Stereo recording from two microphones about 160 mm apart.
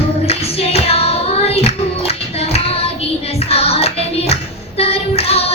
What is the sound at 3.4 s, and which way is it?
Music, 40° left (ahead or behind).